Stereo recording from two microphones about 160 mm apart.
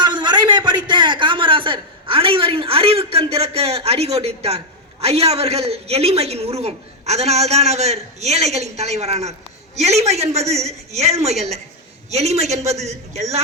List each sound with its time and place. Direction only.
0.0 s a man's voice: 25° right (ahead or behind); by 13.2 s 45° right (ahead or behind)